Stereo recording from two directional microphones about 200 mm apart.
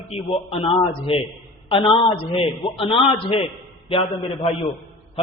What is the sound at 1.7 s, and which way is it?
A man's voice, 25° left (ahead or behind).